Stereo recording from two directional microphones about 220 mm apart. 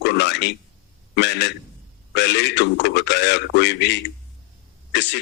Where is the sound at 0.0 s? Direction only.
55° left (ahead or behind).